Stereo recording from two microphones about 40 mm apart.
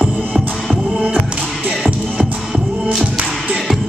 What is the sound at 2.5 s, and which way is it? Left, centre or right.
Music, centre.